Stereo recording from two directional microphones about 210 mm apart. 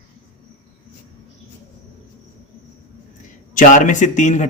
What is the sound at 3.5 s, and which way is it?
Speech, 35° left (ahead or behind).